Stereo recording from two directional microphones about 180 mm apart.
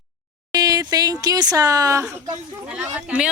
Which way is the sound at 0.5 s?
20° right (ahead or behind).